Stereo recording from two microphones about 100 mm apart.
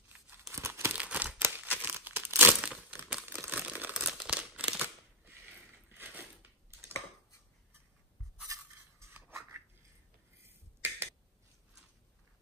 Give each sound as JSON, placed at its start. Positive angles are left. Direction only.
{"t": 0.3, "sound": "tearing", "side_deg": -25}
{"t": 0.9, "sound": "a sound", "side_deg": -15}
{"t": 1.8, "sound": "crumpling", "side_deg": -20}
{"t": 3.3, "sound": "crumpling", "side_deg": -20}
{"t": 4.0, "sound": "crumpling", "side_deg": 0}
{"t": 4.3, "sound": "scissors", "side_deg": -10}
{"t": 5.9, "sound": "crushing", "side_deg": -20}
{"t": 8.5, "sound": "a sound", "side_deg": -35}